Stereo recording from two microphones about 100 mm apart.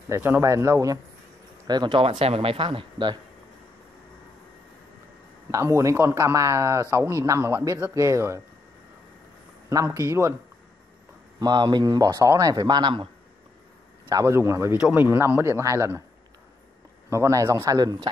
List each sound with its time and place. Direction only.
0.1 s a man's voice: 25° right (ahead or behind)
1.7 s speech: 50° right (ahead or behind)
2.0 s speech: 85° right; by 3.2 s 55° right (ahead or behind)
5.5 s a man's voice: 30° right (ahead or behind)
9.7 s speech: 35° right (ahead or behind)
11.3 s a man's voice: 40° right (ahead or behind)
14.2 s a man's voice: 25° right (ahead or behind)
17.1 s a man's voice: 30° right (ahead or behind)
17.7 s a man's voice: 40° right (ahead or behind)